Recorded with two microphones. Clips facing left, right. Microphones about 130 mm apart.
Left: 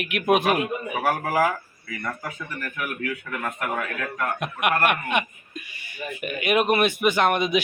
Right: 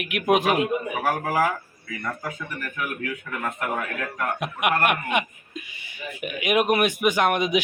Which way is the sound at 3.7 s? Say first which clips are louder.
Even; 10° right (ahead or behind).